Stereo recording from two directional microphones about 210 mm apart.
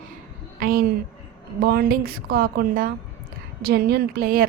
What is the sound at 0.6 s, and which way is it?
A woman's voice, 45° right (ahead or behind).